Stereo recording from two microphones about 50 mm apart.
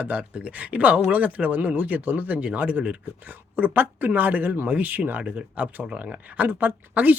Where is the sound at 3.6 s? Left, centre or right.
Right.